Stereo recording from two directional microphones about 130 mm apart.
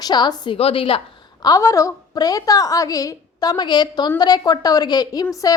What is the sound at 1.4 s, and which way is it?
A woman's voice, 25° left (ahead or behind).